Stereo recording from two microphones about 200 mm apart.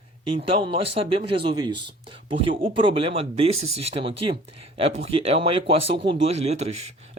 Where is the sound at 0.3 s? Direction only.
25° right (ahead or behind).